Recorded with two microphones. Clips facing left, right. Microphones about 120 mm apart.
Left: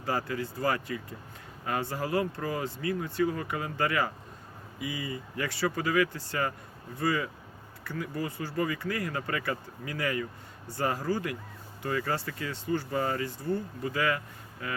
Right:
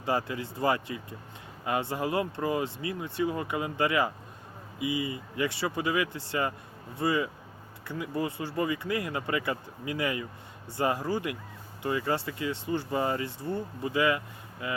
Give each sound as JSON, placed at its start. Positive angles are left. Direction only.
{"t": 0.0, "sound": "speech", "side_deg": -20}